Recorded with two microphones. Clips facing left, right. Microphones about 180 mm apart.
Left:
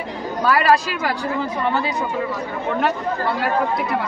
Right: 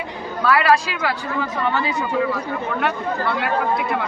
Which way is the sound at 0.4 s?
40° left (ahead or behind).